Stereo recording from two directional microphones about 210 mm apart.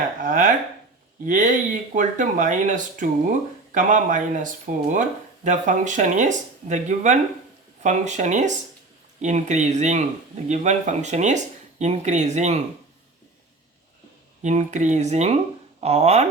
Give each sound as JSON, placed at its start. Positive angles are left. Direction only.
{"t": 0.2, "sound": "speech", "side_deg": -40}
{"t": 14.4, "sound": "speech", "side_deg": -35}